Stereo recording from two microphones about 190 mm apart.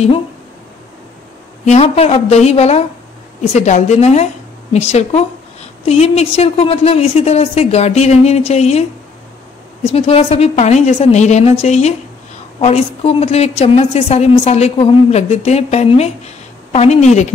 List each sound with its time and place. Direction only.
1.7 s a woman's voice: 35° left (ahead or behind)
9.8 s a woman's voice: 30° left (ahead or behind)